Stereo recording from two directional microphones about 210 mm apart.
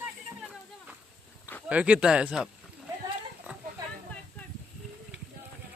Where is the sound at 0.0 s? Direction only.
5° right (ahead or behind).